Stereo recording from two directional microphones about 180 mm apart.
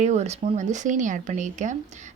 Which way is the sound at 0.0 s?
40° right (ahead or behind).